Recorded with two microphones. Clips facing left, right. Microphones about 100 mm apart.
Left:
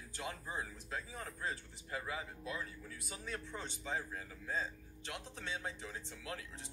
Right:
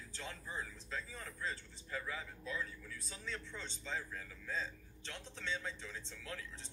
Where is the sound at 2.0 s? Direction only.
20° left (ahead or behind).